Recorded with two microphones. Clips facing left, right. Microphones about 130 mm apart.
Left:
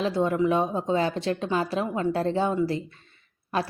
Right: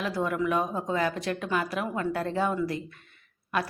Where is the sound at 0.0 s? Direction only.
25° left (ahead or behind).